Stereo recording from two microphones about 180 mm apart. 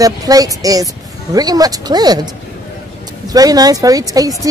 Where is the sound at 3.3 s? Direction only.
20° right (ahead or behind).